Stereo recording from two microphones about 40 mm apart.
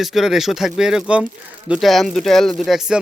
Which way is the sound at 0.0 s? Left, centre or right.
Centre.